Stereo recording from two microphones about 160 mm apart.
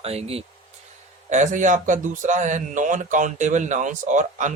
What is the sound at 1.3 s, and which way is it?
Speech, 50° right (ahead or behind).